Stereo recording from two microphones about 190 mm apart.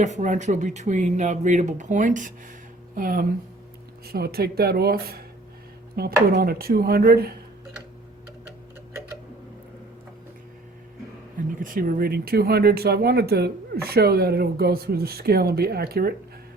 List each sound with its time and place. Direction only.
0.0 s speech: 40° right (ahead or behind)
11.6 s speech: 45° right (ahead or behind)